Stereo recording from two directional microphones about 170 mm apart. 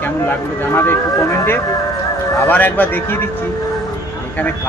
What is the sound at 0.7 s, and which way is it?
Speech, 15° left (ahead or behind).